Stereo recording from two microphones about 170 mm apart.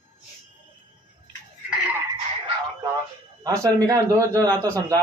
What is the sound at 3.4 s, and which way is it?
Speech, 20° right (ahead or behind).